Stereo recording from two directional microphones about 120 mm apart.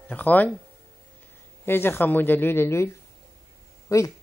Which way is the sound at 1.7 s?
20° left (ahead or behind).